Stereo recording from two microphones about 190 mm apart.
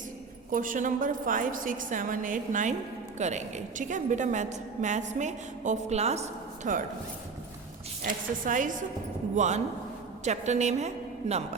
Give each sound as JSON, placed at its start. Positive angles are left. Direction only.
{"t": 0.5, "sound": "a woman's voice", "side_deg": -45}
{"t": 8.0, "sound": "a woman's voice", "side_deg": -45}